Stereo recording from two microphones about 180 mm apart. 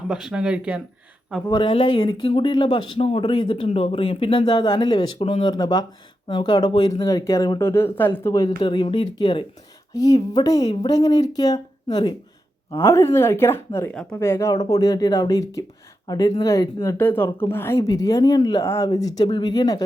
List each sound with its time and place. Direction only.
0.1 s speech: 5° right (ahead or behind)
1.5 s speech: 25° left (ahead or behind)